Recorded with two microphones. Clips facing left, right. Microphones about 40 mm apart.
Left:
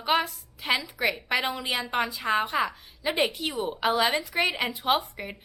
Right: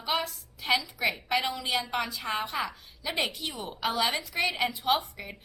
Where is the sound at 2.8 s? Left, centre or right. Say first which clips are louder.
Left 5 dB; left.